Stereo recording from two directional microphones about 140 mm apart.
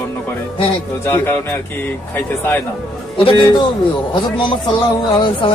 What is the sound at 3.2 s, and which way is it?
Speech, 40° left (ahead or behind).